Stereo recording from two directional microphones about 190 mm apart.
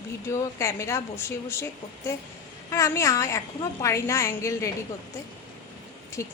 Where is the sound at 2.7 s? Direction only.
15° left (ahead or behind).